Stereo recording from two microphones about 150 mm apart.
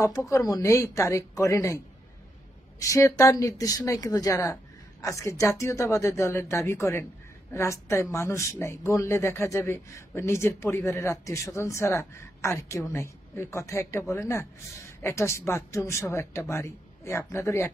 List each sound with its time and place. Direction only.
0.0 s speech: 20° left (ahead or behind)
2.8 s speech: 20° left (ahead or behind)